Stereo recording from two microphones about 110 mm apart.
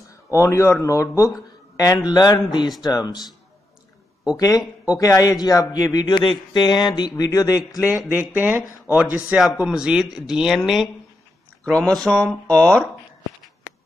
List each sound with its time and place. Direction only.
0.0 s a man's voice: 25° left (ahead or behind)
4.4 s a man's voice: 35° left (ahead or behind)
8.1 s speech: 15° right (ahead or behind)
11.6 s speech: 5° left (ahead or behind)